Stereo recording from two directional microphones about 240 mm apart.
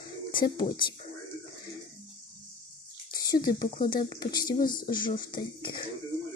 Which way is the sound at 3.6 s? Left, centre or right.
Centre.